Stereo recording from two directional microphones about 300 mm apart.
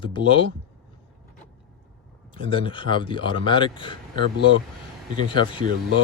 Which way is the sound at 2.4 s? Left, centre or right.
Centre.